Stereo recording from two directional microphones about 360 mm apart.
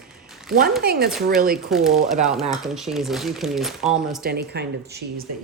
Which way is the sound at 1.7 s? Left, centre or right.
Centre.